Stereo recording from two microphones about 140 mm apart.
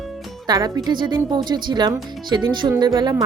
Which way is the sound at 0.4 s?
30° right (ahead or behind).